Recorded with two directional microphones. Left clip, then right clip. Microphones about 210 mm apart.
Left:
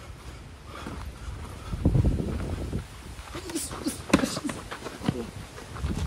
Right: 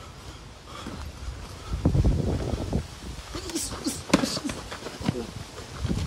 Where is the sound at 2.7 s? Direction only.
90° right.